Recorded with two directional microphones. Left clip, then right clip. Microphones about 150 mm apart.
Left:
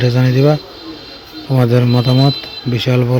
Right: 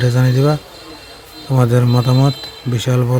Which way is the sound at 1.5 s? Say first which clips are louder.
Left 2 dB; 10° right (ahead or behind).